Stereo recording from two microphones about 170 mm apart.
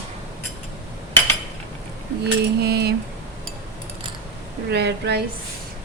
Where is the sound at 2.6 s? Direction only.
70° right (ahead or behind).